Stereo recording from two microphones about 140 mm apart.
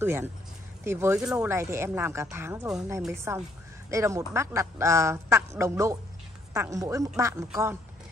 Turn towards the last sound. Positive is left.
turn(degrees=-20)  # may be behind; listen again after turning